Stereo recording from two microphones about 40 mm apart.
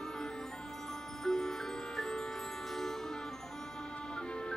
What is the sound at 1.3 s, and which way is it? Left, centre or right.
Music, centre.